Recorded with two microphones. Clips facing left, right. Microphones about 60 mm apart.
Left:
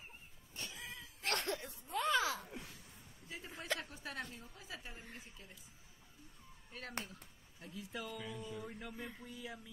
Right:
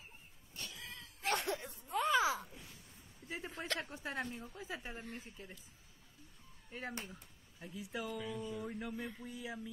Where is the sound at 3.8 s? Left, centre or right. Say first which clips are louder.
Right 4 dB; right.